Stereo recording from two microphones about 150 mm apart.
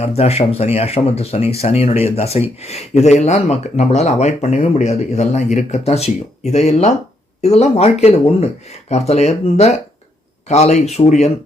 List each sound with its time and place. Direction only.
0.0 s speech: 45° left (ahead or behind)